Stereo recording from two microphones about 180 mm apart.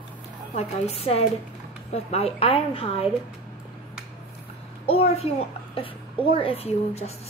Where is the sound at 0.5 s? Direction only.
35° left (ahead or behind).